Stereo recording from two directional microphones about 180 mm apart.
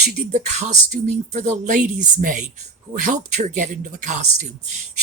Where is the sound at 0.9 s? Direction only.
40° right (ahead or behind).